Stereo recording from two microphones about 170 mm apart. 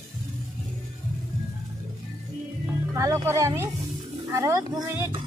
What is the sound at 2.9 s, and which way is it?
Speech, 15° right (ahead or behind).